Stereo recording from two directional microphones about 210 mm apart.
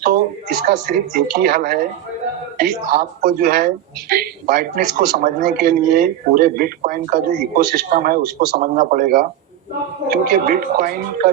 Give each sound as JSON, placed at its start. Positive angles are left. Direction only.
{"t": 0.0, "sound": "a woman's voice", "side_deg": -45}